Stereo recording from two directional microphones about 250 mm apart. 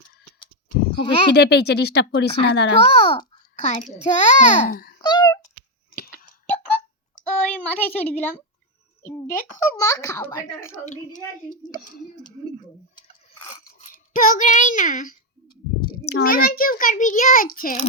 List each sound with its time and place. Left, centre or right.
0.9 s a child's voice: left
1.3 s a child's voice: left
2.8 s a child's voice: left
4.9 s a sound: centre
7.6 s a child's voice: centre
11.8 s a child's voice: left
13.0 s a sound: left
16.0 s a child's voice: left